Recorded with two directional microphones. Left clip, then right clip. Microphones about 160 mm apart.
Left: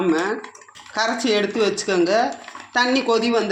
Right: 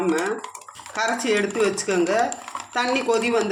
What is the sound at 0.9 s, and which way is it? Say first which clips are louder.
Speech: left 2 dB; 25° left (ahead or behind).